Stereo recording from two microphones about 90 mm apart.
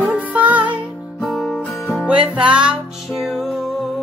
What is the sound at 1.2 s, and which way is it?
Music, centre (ahead or behind).